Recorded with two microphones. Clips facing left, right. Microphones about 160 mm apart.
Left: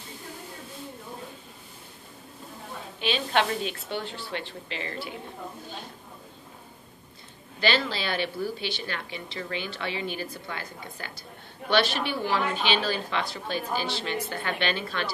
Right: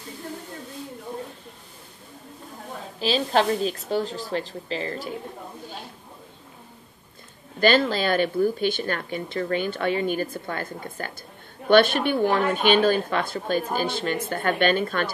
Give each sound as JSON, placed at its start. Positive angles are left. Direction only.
{"t": 3.0, "sound": "speech", "side_deg": -35}
{"t": 7.6, "sound": "speech", "side_deg": -50}